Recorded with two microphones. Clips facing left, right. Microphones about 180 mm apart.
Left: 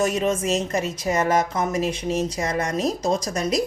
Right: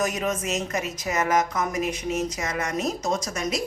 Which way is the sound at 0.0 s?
30° left (ahead or behind).